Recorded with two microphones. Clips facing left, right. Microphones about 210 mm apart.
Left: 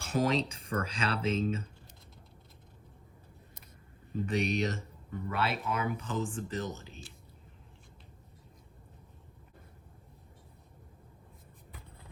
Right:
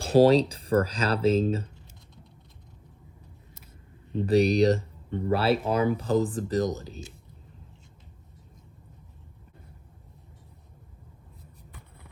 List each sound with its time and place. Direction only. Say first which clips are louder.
0.0 s speech: right 11 dB; 35° right (ahead or behind)
4.3 s speech: right 11 dB; 35° right (ahead or behind)